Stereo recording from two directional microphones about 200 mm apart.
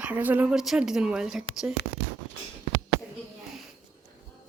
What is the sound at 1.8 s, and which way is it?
Speech, 55° left (ahead or behind).